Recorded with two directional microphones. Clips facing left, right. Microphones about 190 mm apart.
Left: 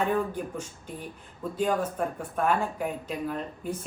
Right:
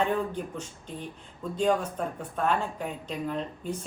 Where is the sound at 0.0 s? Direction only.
10° left (ahead or behind).